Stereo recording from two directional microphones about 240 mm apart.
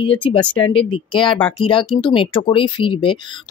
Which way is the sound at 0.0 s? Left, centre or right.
Left.